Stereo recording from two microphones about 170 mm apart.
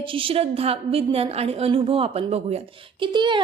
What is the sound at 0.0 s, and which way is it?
A woman's voice, 30° right (ahead or behind).